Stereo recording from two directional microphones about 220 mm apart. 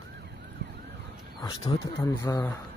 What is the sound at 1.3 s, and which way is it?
Speech, 15° left (ahead or behind).